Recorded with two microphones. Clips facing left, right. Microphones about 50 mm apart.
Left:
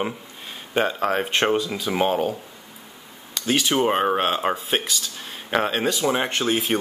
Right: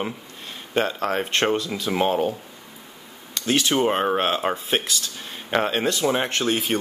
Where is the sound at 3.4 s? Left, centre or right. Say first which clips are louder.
Even; centre.